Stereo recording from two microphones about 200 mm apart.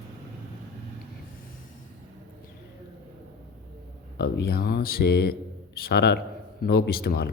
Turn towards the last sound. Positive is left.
turn(degrees=50)  # may be behind; listen again after turning